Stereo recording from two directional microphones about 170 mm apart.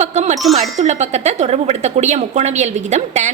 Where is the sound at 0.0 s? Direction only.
40° right (ahead or behind).